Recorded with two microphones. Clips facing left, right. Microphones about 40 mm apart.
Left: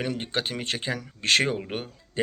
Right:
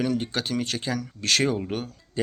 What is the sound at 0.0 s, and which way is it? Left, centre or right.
Speech, left.